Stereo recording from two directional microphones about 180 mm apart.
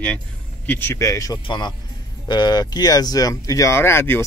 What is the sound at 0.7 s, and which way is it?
Speech, 10° left (ahead or behind).